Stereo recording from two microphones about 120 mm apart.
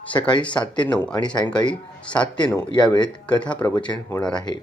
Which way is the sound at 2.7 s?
40° left (ahead or behind).